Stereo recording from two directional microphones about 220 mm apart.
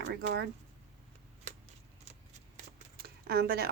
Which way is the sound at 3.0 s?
45° right (ahead or behind).